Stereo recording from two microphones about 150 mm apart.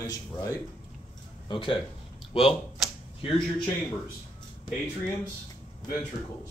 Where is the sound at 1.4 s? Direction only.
35° left (ahead or behind).